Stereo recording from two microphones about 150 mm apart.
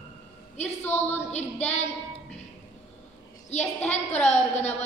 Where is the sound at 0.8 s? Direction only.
15° left (ahead or behind).